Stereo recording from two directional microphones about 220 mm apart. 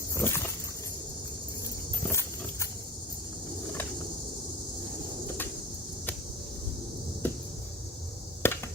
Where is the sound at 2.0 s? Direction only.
10° left (ahead or behind).